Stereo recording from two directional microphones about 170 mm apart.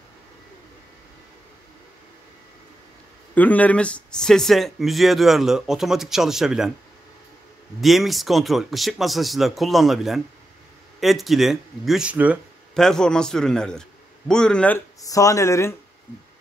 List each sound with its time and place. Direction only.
3.3 s speech: 10° left (ahead or behind)
7.8 s speech: centre (ahead or behind)
12.7 s a man's voice: 5° left (ahead or behind)
15.0 s speech: 20° left (ahead or behind)